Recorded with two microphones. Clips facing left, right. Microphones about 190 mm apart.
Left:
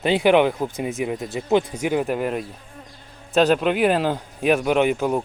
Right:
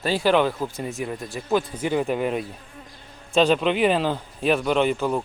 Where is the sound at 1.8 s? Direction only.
5° left (ahead or behind).